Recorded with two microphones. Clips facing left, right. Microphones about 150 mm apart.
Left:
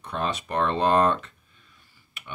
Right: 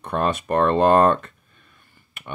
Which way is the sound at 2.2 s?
55° right (ahead or behind).